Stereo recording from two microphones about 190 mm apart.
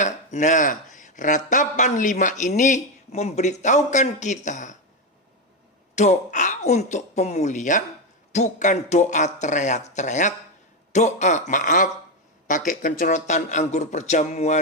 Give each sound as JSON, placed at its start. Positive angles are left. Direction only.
{"t": 0.0, "sound": "speech", "side_deg": 40}
{"t": 6.0, "sound": "speech", "side_deg": 40}